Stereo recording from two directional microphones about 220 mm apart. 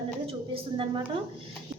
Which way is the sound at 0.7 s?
25° right (ahead or behind).